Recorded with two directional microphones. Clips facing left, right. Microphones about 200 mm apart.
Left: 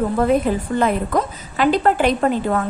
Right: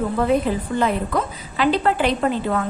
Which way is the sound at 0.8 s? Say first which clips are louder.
Left 2 dB; 45° left (ahead or behind).